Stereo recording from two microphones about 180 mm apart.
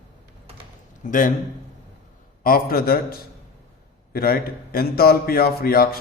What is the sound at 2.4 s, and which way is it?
A man's voice, 55° left (ahead or behind).